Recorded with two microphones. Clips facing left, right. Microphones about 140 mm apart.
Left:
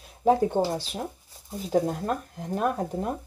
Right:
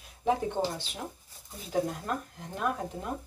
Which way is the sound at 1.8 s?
45° left (ahead or behind).